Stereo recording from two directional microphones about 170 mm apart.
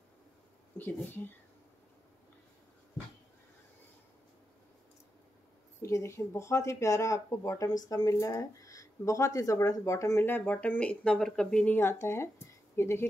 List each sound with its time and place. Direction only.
0.7 s speech: 10° left (ahead or behind)
5.8 s speech: 15° left (ahead or behind)